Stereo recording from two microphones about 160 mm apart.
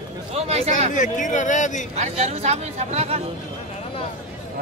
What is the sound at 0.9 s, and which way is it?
Speech, 55° left (ahead or behind).